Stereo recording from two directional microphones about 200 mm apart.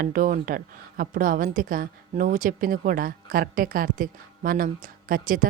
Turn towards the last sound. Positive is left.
turn(degrees=-45)  # may be behind; listen again after turning